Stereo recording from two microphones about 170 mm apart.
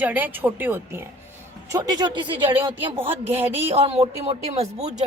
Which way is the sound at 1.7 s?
25° right (ahead or behind).